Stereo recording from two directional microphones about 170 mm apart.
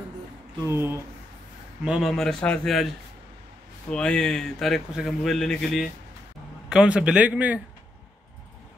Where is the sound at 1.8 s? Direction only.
5° right (ahead or behind).